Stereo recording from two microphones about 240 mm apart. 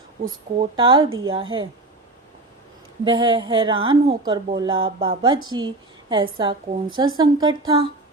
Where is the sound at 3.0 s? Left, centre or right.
Centre.